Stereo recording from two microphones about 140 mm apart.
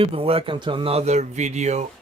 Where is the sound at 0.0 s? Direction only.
40° right (ahead or behind).